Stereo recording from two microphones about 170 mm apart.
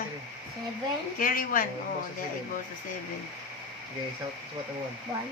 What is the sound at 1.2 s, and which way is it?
Speech, 55° left (ahead or behind).